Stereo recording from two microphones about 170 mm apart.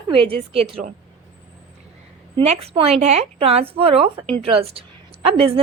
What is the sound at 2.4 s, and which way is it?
A woman's voice, 35° right (ahead or behind).